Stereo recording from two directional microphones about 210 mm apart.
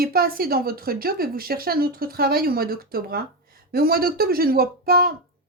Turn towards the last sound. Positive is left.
turn(degrees=-45)  # may be behind; listen again after turning